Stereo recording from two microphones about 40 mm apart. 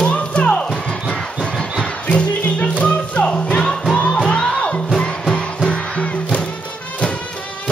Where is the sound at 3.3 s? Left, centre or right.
Centre.